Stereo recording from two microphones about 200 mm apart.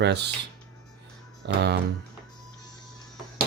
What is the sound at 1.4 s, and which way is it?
Speech, 55° right (ahead or behind).